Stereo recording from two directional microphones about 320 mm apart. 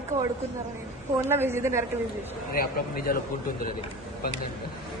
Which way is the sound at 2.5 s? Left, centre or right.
Left.